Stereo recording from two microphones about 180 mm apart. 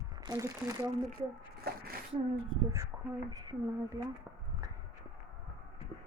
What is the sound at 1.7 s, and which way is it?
Speech, 60° right (ahead or behind).